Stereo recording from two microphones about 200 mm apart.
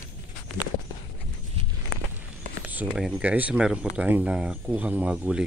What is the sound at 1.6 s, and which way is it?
Walk, 30° right (ahead or behind).